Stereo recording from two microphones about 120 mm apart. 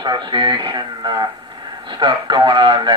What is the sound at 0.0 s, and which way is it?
Speech, 40° right (ahead or behind).